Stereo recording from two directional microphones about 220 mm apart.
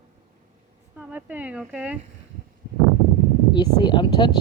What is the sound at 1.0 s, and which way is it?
Speech, 5° right (ahead or behind).